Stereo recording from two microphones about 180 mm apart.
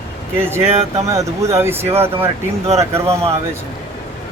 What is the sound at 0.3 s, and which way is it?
Speech, 15° right (ahead or behind).